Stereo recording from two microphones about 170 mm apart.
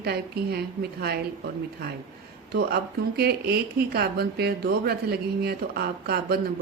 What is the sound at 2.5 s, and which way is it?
Speech, 65° right (ahead or behind).